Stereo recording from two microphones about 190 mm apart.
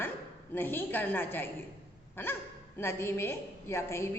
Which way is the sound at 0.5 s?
10° left (ahead or behind).